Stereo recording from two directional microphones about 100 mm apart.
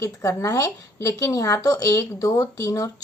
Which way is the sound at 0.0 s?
30° left (ahead or behind).